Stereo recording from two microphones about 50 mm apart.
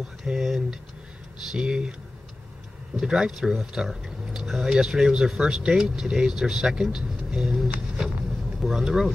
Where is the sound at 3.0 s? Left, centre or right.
Centre.